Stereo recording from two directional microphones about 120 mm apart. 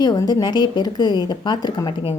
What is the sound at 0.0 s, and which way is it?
A woman's voice, 35° left (ahead or behind).